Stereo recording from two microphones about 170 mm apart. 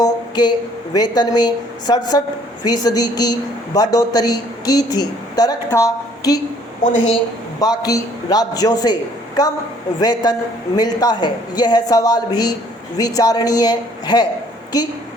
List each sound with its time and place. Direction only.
0.0 s a sound: 25° left (ahead or behind)
0.9 s a man's voice: 25° left (ahead or behind)
7.6 s a man's voice: 20° left (ahead or behind)